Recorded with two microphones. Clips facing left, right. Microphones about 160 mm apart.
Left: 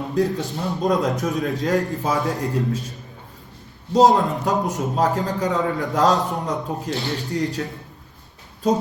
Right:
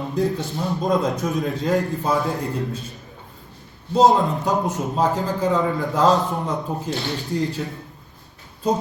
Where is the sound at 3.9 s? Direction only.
Centre (ahead or behind).